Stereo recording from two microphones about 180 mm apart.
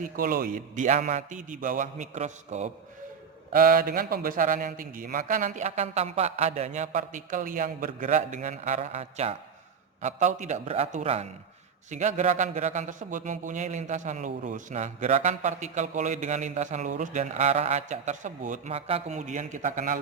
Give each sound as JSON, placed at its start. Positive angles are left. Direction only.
{"t": 0.0, "sound": "a man's voice", "side_deg": -50}
{"t": 3.5, "sound": "a man's voice", "side_deg": -50}